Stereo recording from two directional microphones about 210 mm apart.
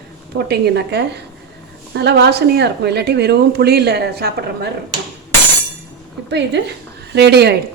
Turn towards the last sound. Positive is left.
turn(degrees=-50)  # may be behind; listen again after turning